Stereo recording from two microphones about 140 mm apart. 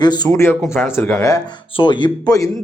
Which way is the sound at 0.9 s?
15° left (ahead or behind).